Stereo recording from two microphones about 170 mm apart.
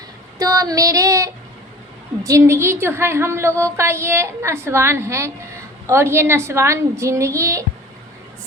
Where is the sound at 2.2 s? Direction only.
20° right (ahead or behind).